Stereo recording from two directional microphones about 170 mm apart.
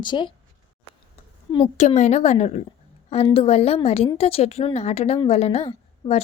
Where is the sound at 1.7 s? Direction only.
40° left (ahead or behind).